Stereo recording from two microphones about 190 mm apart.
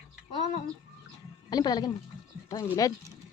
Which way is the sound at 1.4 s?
20° left (ahead or behind).